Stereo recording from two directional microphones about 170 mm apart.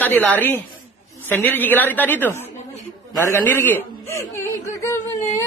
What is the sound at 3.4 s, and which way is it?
Speech, 10° left (ahead or behind).